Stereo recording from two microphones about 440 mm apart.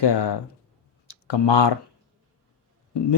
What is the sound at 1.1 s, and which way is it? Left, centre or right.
Speech, left.